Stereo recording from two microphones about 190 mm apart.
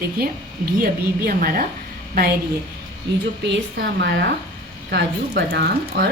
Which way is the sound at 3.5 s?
75° right (ahead or behind).